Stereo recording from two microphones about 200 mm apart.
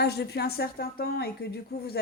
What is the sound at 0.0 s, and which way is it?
Speech, 55° left (ahead or behind).